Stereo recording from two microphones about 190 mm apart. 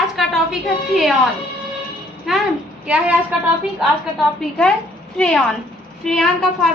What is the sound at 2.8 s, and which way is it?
Speech, 5° right (ahead or behind).